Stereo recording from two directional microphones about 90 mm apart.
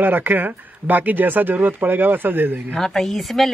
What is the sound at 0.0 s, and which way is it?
Speech, 20° right (ahead or behind).